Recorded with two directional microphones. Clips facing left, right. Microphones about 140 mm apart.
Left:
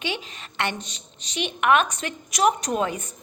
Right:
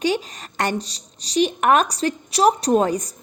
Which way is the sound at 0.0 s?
40° right (ahead or behind).